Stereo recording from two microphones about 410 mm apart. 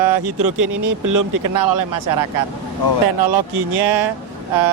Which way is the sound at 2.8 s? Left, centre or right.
Left.